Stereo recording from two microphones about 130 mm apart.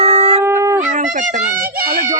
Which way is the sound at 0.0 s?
55° right (ahead or behind).